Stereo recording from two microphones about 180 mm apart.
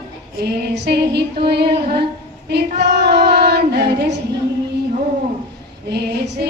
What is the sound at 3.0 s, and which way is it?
Female singing, 65° right (ahead or behind).